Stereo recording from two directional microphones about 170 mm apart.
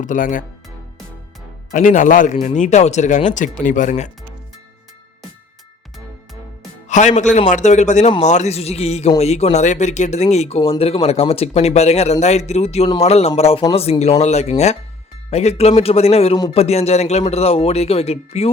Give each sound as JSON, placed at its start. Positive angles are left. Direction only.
{"t": 0.0, "sound": "speech", "side_deg": 50}
{"t": 1.7, "sound": "speech", "side_deg": 50}
{"t": 6.8, "sound": "speech", "side_deg": 45}